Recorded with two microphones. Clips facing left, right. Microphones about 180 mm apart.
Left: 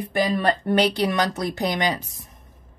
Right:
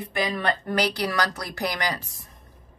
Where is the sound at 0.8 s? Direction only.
25° left (ahead or behind).